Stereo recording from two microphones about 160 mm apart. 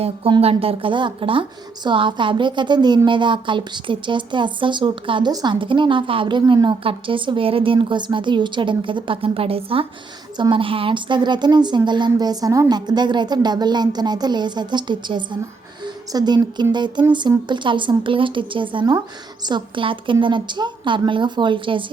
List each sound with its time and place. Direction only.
0.0 s a woman's voice: 35° right (ahead or behind)